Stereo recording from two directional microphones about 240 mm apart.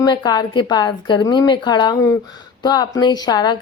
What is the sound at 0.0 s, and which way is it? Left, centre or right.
Speech, centre.